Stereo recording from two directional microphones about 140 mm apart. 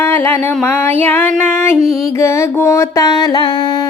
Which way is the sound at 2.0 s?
20° left (ahead or behind).